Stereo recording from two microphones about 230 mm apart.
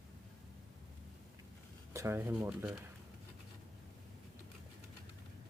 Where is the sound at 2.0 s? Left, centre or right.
Centre.